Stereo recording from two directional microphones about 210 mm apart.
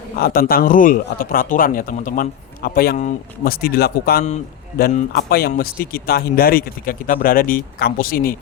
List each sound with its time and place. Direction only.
0.2 s a man's voice: 45° left (ahead or behind)